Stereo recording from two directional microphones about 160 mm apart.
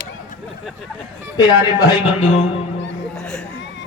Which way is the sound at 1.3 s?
25° left (ahead or behind).